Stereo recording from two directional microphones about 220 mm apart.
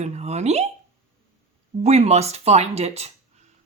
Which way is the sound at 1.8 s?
30° right (ahead or behind).